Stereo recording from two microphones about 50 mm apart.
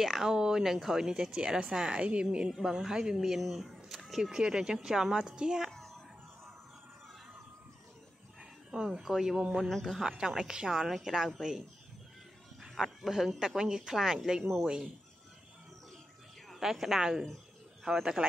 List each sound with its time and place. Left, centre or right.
0.0 s speech: centre
5.7 s music: centre
8.4 s speech: centre
12.7 s speech: centre
16.5 s speech: centre